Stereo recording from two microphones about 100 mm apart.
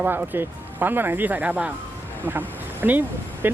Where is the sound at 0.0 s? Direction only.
20° right (ahead or behind).